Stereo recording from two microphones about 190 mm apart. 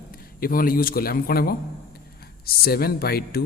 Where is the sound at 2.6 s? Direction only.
55° left (ahead or behind).